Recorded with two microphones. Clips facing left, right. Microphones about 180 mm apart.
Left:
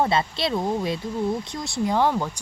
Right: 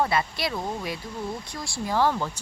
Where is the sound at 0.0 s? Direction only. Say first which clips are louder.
Left 3 dB; 25° left (ahead or behind).